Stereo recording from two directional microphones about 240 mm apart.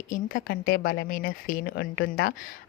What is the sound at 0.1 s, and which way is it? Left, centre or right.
A woman's voice, left.